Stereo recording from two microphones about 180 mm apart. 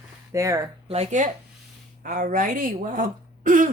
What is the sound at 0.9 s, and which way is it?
A woman's voice, 40° right (ahead or behind).